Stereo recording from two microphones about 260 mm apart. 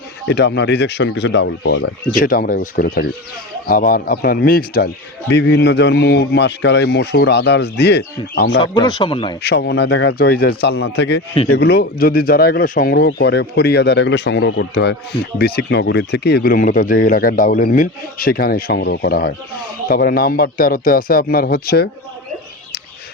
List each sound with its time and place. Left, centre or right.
0.3 s speech: left
8.6 s speech: centre
9.4 s speech: left